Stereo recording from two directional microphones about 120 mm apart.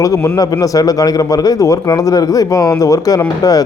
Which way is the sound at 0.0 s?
30° left (ahead or behind).